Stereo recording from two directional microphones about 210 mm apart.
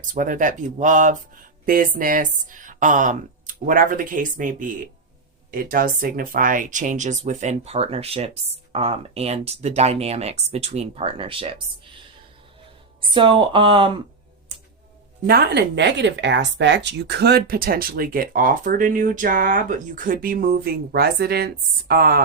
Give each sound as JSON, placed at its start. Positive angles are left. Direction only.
{"t": 0.1, "sound": "speech", "side_deg": -40}
{"t": 13.0, "sound": "speech", "side_deg": -25}
{"t": 15.3, "sound": "speech", "side_deg": -50}